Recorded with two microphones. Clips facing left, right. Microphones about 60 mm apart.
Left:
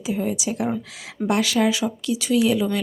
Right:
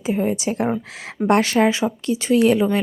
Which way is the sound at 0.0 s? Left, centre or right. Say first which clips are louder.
Right 4 dB; right.